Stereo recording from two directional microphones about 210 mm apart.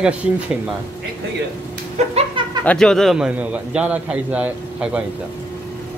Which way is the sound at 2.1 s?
25° right (ahead or behind).